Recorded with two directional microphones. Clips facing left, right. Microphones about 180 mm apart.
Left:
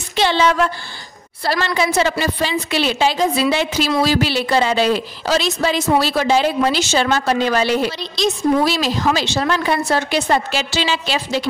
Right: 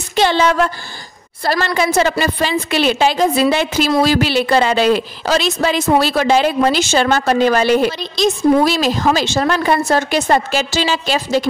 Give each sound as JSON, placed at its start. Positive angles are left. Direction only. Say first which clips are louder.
{"t": 0.1, "sound": "a woman's voice", "louder": "right 2 dB", "side_deg": -45}